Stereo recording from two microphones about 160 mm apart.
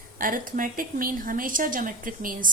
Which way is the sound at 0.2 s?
60° right (ahead or behind).